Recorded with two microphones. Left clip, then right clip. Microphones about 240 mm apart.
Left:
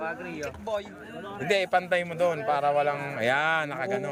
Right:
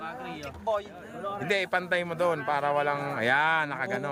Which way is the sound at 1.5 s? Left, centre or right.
Centre.